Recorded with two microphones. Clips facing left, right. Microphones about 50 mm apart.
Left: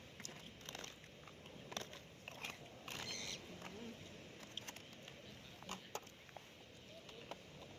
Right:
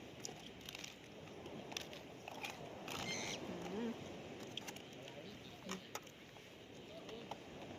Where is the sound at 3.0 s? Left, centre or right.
Right.